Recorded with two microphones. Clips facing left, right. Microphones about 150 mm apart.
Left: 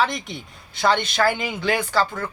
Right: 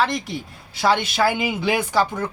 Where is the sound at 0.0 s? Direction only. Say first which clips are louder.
Right 1 dB; centre (ahead or behind).